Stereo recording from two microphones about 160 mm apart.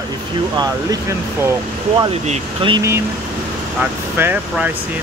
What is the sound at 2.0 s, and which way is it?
Speech, 35° right (ahead or behind).